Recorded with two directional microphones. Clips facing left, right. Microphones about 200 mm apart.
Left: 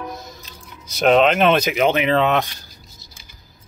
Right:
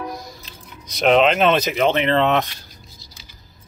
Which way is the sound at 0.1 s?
25° left (ahead or behind).